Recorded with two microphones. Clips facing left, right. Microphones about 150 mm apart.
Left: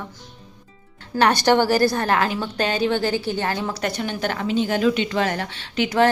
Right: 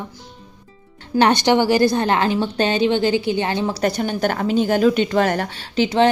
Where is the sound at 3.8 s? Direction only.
40° right (ahead or behind).